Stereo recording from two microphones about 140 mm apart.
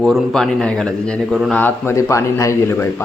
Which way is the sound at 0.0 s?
Centre (ahead or behind).